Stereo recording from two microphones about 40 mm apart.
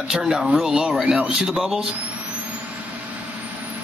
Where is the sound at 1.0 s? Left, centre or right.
Centre.